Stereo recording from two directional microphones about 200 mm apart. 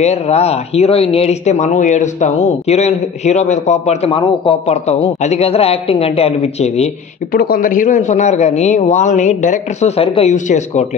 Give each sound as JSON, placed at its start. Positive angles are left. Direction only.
{"t": 0.0, "sound": "speech", "side_deg": 30}
{"t": 7.3, "sound": "speech", "side_deg": 45}